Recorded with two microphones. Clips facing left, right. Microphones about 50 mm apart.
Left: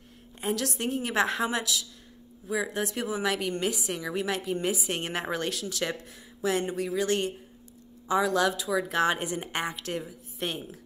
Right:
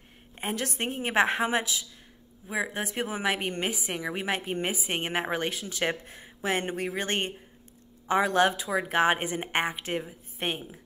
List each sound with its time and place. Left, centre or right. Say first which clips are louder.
0.4 s a woman's voice: left 1 dB; right